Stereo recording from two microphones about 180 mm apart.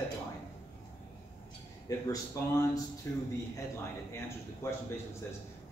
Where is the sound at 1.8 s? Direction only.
20° left (ahead or behind).